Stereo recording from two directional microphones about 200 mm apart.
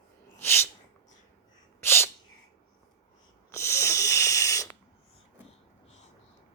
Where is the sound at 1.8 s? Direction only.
10° left (ahead or behind).